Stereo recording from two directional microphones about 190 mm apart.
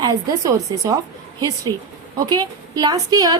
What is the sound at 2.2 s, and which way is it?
A woman's voice, 20° right (ahead or behind).